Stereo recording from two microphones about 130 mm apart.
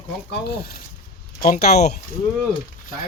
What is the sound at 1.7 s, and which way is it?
Speech, 65° left (ahead or behind).